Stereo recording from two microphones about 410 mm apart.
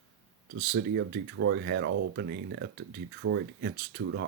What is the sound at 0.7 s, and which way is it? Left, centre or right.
Speech, right.